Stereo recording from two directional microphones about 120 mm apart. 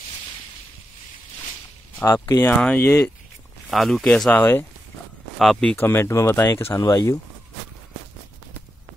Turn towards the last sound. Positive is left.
turn(degrees=25)  # may be behind; listen again after turning